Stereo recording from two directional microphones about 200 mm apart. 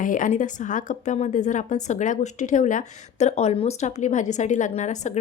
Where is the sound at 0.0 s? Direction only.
40° left (ahead or behind).